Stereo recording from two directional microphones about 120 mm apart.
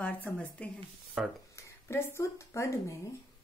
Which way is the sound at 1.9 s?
20° left (ahead or behind).